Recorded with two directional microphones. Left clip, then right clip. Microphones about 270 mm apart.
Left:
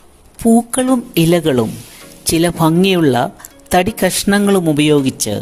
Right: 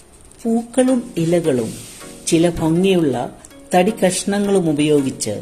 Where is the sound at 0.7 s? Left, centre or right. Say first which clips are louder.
Left 2 dB; left.